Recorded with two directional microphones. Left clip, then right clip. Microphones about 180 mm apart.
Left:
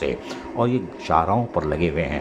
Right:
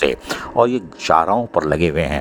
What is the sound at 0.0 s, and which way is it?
A man's voice, 45° right (ahead or behind).